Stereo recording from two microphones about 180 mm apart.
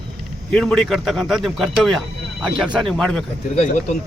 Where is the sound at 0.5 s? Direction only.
Centre (ahead or behind).